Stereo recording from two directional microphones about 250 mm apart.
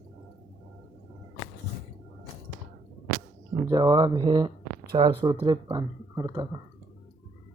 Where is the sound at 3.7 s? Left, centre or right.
Centre.